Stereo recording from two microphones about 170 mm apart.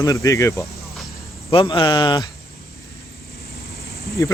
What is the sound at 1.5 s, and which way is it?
Speech, 30° left (ahead or behind).